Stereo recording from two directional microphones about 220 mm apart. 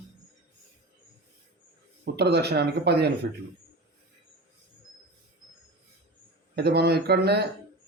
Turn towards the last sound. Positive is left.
turn(degrees=-45)  # may be behind; listen again after turning